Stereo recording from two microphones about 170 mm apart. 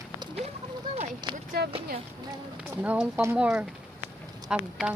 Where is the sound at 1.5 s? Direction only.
65° right (ahead or behind).